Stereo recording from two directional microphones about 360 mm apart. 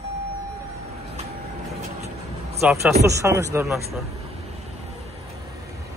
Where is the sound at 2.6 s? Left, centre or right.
Centre.